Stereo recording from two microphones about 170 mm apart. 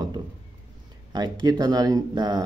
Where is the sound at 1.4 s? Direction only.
25° right (ahead or behind).